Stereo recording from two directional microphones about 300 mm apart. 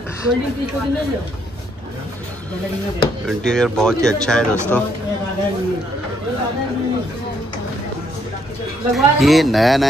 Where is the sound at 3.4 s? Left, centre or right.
Centre.